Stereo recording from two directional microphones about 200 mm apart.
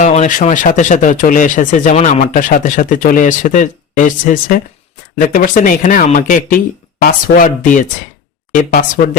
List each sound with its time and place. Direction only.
0.0 s speech: 35° left (ahead or behind)